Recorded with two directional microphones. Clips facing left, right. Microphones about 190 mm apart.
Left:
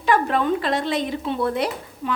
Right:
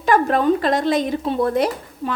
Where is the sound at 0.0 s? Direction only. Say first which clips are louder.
Right 3 dB; 45° right (ahead or behind).